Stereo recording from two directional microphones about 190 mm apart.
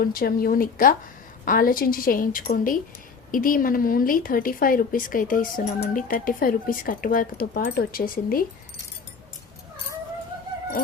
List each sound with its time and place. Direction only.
0.0 s speech: 50° left (ahead or behind)